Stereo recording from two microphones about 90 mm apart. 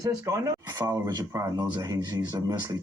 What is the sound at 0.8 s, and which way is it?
Speech, 30° right (ahead or behind).